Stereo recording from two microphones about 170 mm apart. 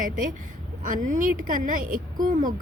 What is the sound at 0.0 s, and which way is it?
A woman's voice, 50° right (ahead or behind).